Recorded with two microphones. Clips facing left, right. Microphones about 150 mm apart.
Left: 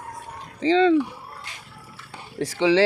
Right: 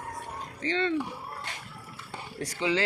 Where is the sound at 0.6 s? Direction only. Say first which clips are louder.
Left 11 dB; 90° left.